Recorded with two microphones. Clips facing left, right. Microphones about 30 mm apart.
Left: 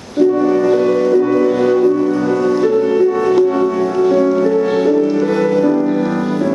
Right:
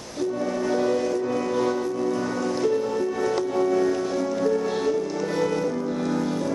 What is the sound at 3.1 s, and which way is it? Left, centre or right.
Music, left.